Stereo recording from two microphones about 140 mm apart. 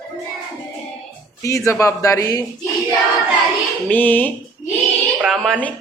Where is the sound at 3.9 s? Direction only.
15° left (ahead or behind).